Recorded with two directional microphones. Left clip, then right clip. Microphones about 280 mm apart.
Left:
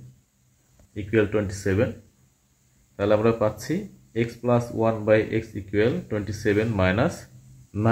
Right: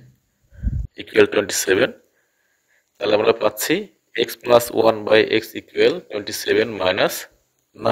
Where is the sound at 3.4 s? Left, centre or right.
Right.